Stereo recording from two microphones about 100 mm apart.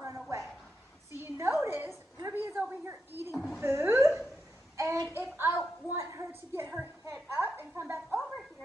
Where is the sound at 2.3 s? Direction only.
20° right (ahead or behind).